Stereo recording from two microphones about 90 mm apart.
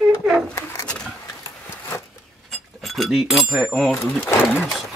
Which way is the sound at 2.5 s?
Centre (ahead or behind).